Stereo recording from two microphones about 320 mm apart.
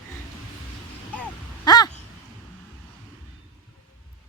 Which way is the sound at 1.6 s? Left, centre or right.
Centre.